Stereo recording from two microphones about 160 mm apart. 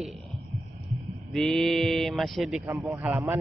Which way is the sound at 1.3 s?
Centre (ahead or behind).